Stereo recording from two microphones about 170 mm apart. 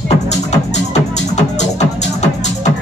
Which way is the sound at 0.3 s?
40° left (ahead or behind).